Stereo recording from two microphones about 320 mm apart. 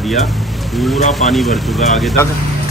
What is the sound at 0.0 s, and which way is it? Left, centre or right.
Speech, centre.